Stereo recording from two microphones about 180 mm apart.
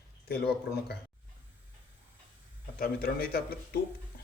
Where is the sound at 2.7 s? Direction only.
55° left (ahead or behind).